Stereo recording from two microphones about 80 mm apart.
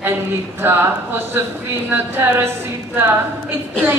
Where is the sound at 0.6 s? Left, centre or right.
Right.